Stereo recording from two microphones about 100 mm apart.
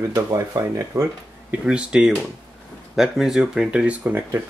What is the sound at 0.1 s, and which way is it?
Speech, 30° right (ahead or behind).